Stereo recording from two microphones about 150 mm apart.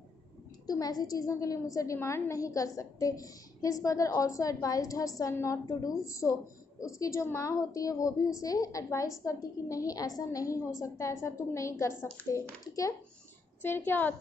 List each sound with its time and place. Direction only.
0.7 s a woman's voice: 25° left (ahead or behind)
13.6 s a woman's voice: 15° left (ahead or behind)